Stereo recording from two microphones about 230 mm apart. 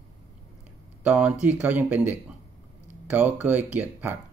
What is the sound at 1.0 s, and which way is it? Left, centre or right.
Speech, centre.